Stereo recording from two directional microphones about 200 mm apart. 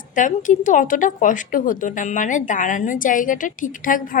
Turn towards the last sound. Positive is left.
turn(degrees=40)  # may be behind; listen again after turning